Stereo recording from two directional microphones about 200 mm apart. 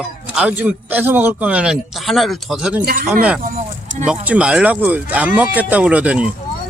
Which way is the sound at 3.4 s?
35° right (ahead or behind).